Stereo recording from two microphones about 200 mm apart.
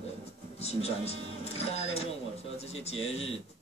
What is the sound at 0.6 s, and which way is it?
A man's voice, 30° left (ahead or behind).